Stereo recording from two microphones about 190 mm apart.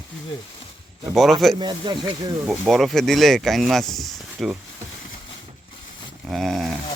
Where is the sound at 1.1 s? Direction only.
Centre (ahead or behind).